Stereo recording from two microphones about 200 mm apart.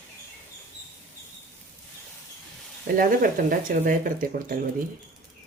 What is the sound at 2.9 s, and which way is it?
Speech, 45° right (ahead or behind).